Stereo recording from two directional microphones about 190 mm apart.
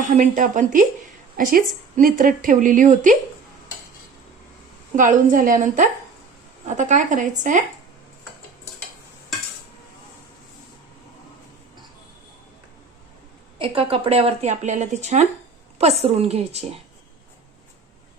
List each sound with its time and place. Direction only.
0.2 s a woman's voice: 40° right (ahead or behind)
4.9 s a woman's voice: 45° right (ahead or behind)
13.6 s speech: 30° right (ahead or behind)